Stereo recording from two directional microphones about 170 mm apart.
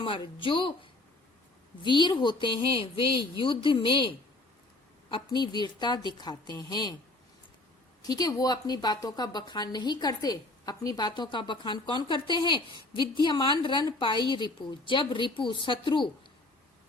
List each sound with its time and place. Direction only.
0.0 s a woman's voice: 30° left (ahead or behind)
1.8 s a woman's voice: 25° left (ahead or behind)
5.1 s a woman's voice: 25° left (ahead or behind)
8.0 s a woman's voice: 20° left (ahead or behind)